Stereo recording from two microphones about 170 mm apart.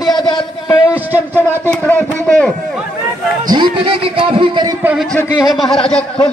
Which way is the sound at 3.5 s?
30° right (ahead or behind).